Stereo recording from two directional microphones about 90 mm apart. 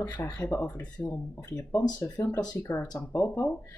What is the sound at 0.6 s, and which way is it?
Speech, 15° left (ahead or behind).